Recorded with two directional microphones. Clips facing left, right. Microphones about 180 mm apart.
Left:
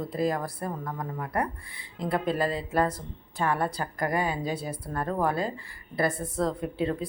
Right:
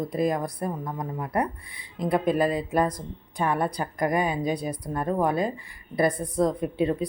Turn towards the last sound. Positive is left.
turn(degrees=-20)  # may be behind; listen again after turning